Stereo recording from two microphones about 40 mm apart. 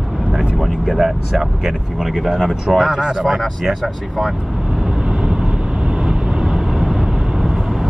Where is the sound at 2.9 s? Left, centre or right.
Centre.